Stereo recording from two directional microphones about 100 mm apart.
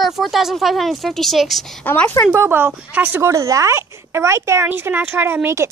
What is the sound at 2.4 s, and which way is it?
Speech, 20° right (ahead or behind).